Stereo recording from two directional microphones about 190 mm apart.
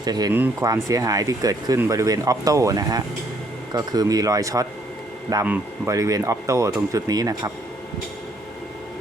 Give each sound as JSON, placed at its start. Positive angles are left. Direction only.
{"t": 0.0, "sound": "speech", "side_deg": -20}